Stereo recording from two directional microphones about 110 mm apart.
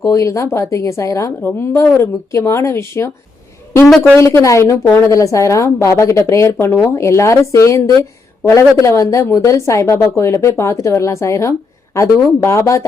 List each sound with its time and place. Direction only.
0.0 s a woman's voice: 30° left (ahead or behind)
3.8 s speech: centre (ahead or behind)
4.2 s a woman's voice: 25° left (ahead or behind)